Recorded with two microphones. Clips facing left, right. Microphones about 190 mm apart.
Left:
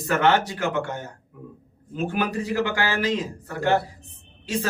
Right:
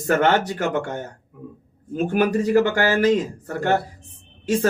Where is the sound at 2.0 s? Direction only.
45° right (ahead or behind).